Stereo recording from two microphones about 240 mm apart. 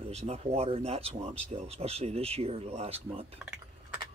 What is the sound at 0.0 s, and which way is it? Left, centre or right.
Speech, right.